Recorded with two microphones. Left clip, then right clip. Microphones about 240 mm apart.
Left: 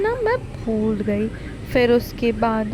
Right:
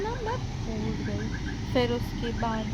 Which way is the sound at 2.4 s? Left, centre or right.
Left.